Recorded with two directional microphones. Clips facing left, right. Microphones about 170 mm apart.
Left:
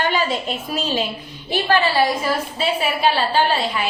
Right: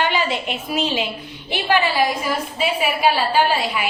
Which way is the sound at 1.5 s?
15° right (ahead or behind).